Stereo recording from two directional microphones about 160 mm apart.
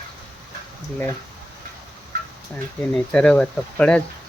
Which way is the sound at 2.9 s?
5° left (ahead or behind).